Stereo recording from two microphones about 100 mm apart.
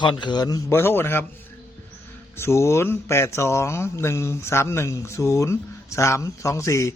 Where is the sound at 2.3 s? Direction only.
25° left (ahead or behind).